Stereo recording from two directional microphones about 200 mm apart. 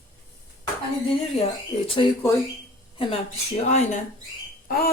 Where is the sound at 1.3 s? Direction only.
25° left (ahead or behind).